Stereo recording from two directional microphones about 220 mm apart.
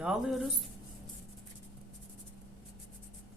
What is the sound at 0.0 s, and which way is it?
Speech, centre (ahead or behind).